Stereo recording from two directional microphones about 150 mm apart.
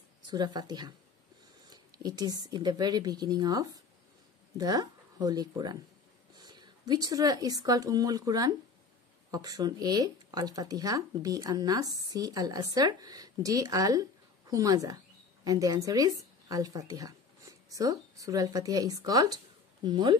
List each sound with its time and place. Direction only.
0.3 s speech: 30° right (ahead or behind)